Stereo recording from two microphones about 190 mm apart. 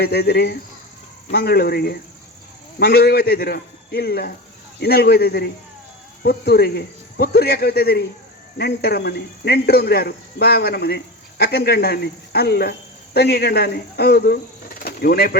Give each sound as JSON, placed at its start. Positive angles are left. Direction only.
{"t": 0.0, "sound": "speech", "side_deg": 55}